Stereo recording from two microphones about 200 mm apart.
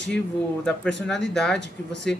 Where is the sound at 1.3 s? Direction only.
5° left (ahead or behind).